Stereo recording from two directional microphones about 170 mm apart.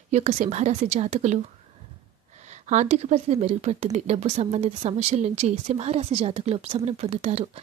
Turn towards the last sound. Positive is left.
turn(degrees=-40)  # may be behind; listen again after turning